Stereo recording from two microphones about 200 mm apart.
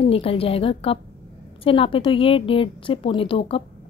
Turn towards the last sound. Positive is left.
turn(degrees=25)  # may be behind; listen again after turning